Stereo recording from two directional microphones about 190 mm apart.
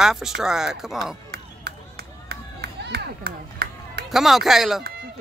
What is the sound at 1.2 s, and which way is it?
Run, 55° right (ahead or behind).